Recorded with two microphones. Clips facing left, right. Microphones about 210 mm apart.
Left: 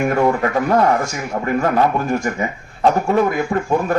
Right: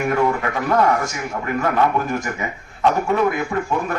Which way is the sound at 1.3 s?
35° left (ahead or behind).